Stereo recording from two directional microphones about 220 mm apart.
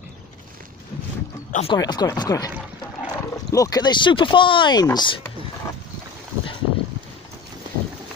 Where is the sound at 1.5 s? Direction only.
30° left (ahead or behind).